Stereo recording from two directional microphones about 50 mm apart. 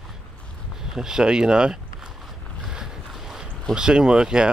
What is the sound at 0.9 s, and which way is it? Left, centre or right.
Speech, centre.